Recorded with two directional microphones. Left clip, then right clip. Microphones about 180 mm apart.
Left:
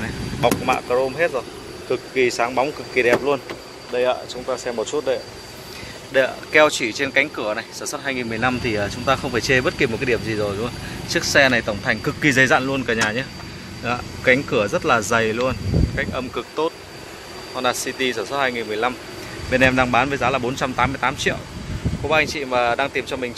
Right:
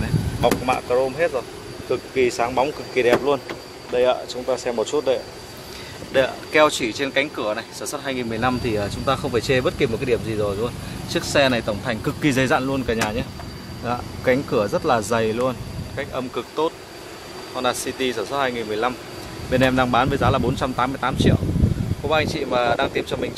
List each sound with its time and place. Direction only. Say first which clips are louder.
0.0 s speech: left 1 dB; 5° right (ahead or behind)
3.9 s speech: right 1 dB; 20° right (ahead or behind)